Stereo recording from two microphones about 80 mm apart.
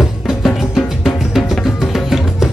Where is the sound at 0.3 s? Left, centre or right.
Centre.